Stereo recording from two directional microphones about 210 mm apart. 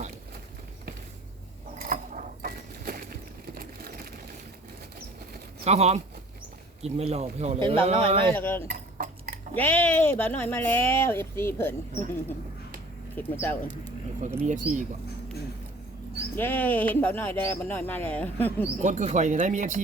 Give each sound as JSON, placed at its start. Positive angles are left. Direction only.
{"t": 1.8, "sound": "a sound", "side_deg": -40}
{"t": 5.6, "sound": "speech", "side_deg": -30}
{"t": 8.3, "sound": "speech", "side_deg": 10}
{"t": 8.6, "sound": "dishes", "side_deg": -45}
{"t": 9.6, "sound": "speech", "side_deg": 10}
{"t": 13.1, "sound": "speech", "side_deg": 10}
{"t": 14.2, "sound": "speech", "side_deg": -35}
{"t": 16.3, "sound": "speech", "side_deg": 10}
{"t": 18.8, "sound": "speech", "side_deg": -35}